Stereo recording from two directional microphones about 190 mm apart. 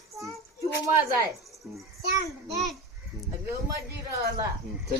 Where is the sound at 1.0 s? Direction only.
15° right (ahead or behind).